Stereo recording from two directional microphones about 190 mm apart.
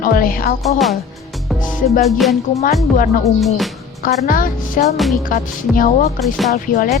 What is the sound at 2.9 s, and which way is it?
Speech, 45° left (ahead or behind).